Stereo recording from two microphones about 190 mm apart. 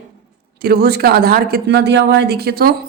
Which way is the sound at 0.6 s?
55° right (ahead or behind).